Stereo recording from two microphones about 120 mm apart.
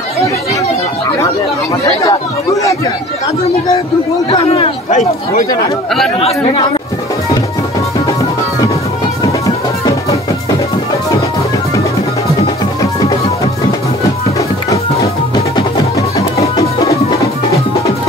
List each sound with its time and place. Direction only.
2.0 s chatter: 30° left (ahead or behind)
4.3 s speech: 55° left (ahead or behind)
6.1 s speech: 50° left (ahead or behind)